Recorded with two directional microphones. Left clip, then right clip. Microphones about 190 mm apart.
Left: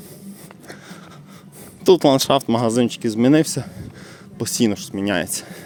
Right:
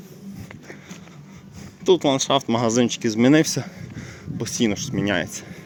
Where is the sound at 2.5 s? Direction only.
15° left (ahead or behind).